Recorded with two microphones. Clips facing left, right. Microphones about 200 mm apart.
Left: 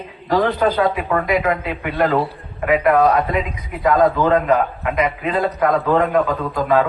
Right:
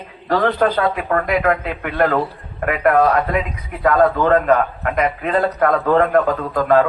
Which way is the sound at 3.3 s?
50° right (ahead or behind).